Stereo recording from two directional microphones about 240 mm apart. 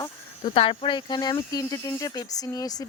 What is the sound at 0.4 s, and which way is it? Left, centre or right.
Speech, left.